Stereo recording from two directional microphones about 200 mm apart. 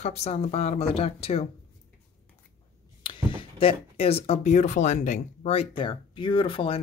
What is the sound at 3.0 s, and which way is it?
Speech, 25° left (ahead or behind).